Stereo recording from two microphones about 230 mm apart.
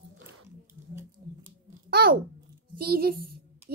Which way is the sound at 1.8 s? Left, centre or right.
Right.